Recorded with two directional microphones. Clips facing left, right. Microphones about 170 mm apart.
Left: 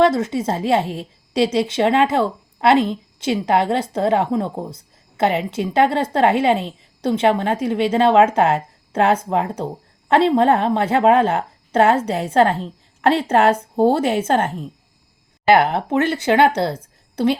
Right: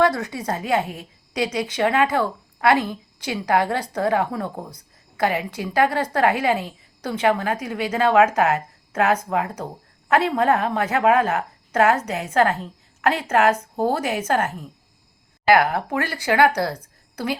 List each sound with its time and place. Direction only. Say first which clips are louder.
0.0 s a woman's voice: left 4 dB; 20° left (ahead or behind)